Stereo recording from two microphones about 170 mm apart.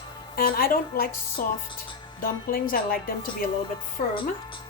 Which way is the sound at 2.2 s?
60° left (ahead or behind).